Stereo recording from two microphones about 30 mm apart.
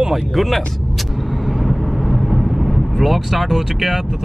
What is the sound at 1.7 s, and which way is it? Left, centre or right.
Speech, centre.